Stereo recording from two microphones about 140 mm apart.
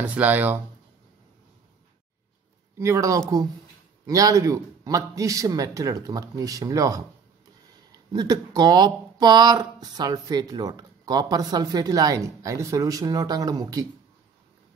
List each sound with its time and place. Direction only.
0.0 s speech: 10° right (ahead or behind)
2.8 s speech: 20° right (ahead or behind)
8.1 s speech: 30° right (ahead or behind)